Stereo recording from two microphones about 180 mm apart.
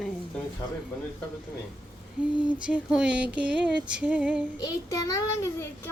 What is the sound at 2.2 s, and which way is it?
Female singing, 5° right (ahead or behind).